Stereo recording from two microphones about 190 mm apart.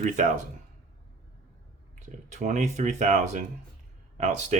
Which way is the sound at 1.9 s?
40° right (ahead or behind).